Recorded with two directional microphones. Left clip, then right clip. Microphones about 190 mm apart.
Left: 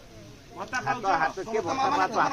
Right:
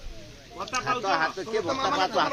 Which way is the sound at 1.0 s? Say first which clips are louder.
Left 2 dB; 45° right (ahead or behind).